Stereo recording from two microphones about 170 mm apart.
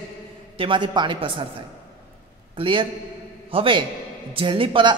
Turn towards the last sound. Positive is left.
turn(degrees=-30)  # may be behind; listen again after turning